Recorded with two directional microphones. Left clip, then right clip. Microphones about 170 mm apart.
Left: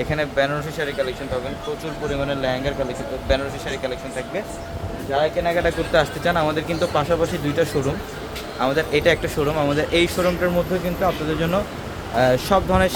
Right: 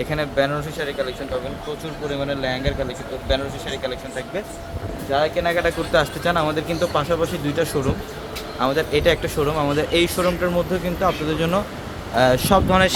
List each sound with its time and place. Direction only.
0.0 s speech: centre (ahead or behind)
5.1 s speech: 20° right (ahead or behind)